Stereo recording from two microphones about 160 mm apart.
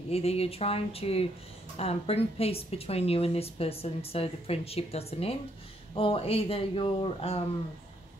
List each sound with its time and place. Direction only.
0.1 s speech: 40° left (ahead or behind)